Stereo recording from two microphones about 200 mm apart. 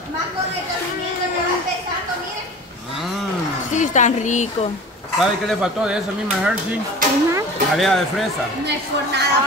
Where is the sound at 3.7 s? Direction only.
40° left (ahead or behind).